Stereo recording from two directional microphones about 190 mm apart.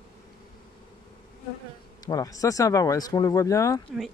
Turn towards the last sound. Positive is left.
turn(degrees=15)  # may be behind; listen again after turning